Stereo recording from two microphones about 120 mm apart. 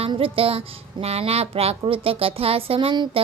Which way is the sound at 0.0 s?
50° right (ahead or behind).